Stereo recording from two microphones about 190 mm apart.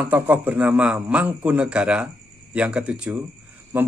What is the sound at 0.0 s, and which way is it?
A man's voice, 10° right (ahead or behind).